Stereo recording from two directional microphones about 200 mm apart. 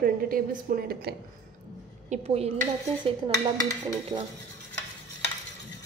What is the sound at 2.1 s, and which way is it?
Speech, 30° right (ahead or behind).